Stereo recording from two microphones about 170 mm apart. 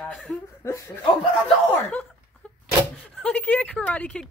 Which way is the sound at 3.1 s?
5° left (ahead or behind).